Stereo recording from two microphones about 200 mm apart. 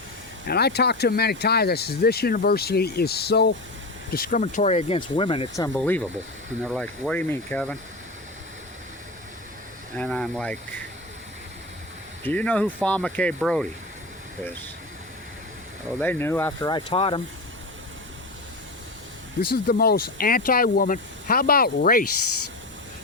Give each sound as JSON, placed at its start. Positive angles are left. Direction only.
{"t": 0.4, "sound": "speech", "side_deg": 55}
{"t": 5.6, "sound": "speech", "side_deg": 10}
{"t": 7.1, "sound": "speech", "side_deg": 10}
{"t": 10.0, "sound": "speech", "side_deg": 5}
{"t": 12.2, "sound": "speech", "side_deg": 5}
{"t": 16.0, "sound": "speech", "side_deg": 10}
{"t": 19.4, "sound": "speech", "side_deg": 50}